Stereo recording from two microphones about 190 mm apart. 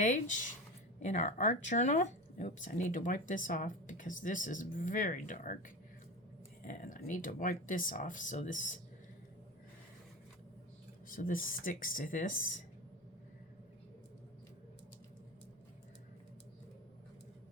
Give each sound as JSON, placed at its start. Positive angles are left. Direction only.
{"t": 0.0, "sound": "speech", "side_deg": 40}
{"t": 11.1, "sound": "speech", "side_deg": 45}